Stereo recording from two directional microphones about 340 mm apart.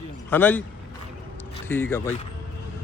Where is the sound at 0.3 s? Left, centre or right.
Centre.